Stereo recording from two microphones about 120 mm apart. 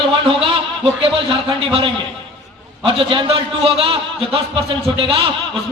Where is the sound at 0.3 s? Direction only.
50° right (ahead or behind).